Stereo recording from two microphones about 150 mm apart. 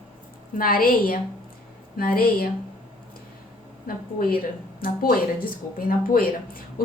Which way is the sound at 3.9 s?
75° left (ahead or behind).